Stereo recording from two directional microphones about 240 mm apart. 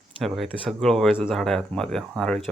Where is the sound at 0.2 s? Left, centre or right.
Centre.